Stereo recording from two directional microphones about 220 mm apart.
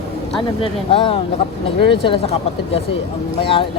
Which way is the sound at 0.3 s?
25° left (ahead or behind).